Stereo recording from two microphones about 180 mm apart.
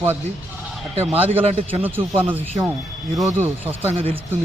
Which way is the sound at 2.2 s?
10° right (ahead or behind).